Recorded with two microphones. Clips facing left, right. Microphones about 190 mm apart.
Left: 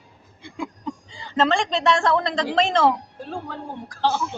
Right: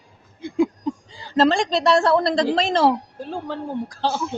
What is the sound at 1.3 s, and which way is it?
A woman's voice, 35° right (ahead or behind).